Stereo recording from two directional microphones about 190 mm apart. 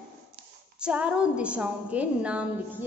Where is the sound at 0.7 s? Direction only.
5° right (ahead or behind).